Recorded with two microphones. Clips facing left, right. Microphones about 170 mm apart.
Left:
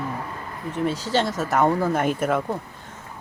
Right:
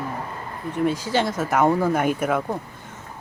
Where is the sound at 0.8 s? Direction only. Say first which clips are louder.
Right 1 dB; centre (ahead or behind).